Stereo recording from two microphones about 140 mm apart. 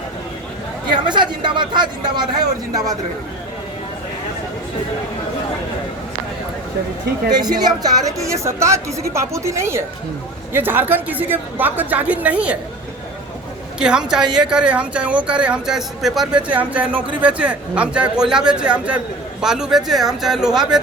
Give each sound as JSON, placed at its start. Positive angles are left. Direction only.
{"t": 1.0, "sound": "speech", "side_deg": -35}
{"t": 7.6, "sound": "speech", "side_deg": -30}
{"t": 13.7, "sound": "a man's voice", "side_deg": -5}